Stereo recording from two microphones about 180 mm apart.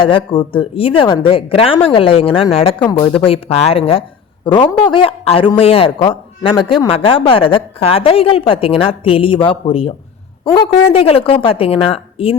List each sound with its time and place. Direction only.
0.0 s a woman's voice: 30° left (ahead or behind)
2.8 s speech: 10° left (ahead or behind)
3.2 s a woman's voice: 30° left (ahead or behind)
10.9 s a woman's voice: 30° left (ahead or behind)